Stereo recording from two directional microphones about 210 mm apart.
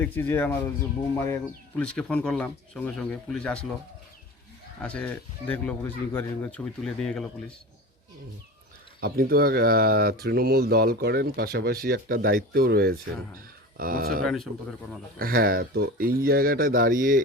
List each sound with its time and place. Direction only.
0.0 s speech: 10° left (ahead or behind)
4.8 s speech: 5° left (ahead or behind)
9.0 s speech: 45° right (ahead or behind)